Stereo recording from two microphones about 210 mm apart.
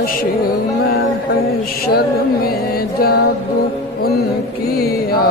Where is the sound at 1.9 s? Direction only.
45° left (ahead or behind).